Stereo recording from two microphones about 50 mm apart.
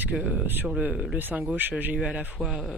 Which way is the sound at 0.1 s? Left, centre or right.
Right.